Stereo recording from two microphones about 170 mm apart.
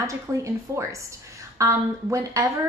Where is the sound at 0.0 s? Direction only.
15° right (ahead or behind).